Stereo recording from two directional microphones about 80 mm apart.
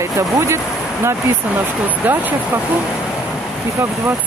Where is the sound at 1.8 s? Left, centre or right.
Right.